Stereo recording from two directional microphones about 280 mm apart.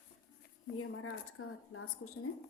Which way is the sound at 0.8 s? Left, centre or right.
Left.